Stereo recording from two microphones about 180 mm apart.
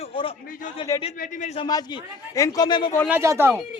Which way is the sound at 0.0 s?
30° left (ahead or behind).